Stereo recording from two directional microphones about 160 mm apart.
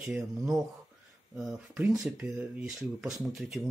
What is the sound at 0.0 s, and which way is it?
Speech, 5° right (ahead or behind).